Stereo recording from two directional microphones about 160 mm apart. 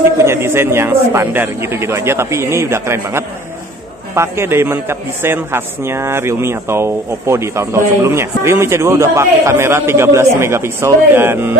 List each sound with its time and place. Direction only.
0.2 s a man's voice: 15° right (ahead or behind)